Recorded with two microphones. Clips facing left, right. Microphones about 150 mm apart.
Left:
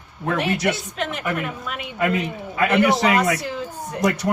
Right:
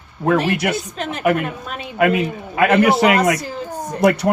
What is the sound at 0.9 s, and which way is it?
Speech, 40° right (ahead or behind).